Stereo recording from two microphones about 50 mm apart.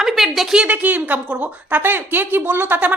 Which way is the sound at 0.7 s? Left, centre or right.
Right.